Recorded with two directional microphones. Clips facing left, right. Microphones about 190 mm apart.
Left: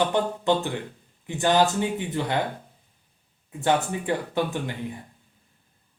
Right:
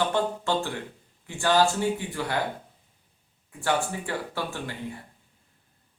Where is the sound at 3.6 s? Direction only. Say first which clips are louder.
Left 3 dB; 20° left (ahead or behind).